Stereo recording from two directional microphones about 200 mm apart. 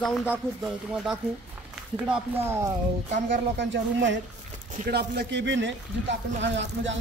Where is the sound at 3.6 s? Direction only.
65° right (ahead or behind).